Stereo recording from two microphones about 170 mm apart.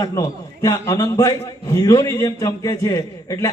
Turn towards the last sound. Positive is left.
turn(degrees=20)  # may be behind; listen again after turning